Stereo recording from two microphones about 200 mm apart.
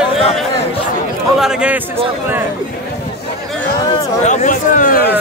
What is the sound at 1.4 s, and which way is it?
Speech, 5° right (ahead or behind).